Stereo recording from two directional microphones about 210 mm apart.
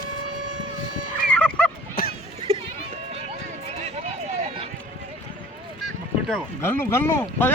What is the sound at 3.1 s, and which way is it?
Run, 30° right (ahead or behind).